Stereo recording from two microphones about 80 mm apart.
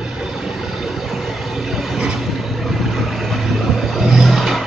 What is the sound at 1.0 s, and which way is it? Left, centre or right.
Vehicle, centre.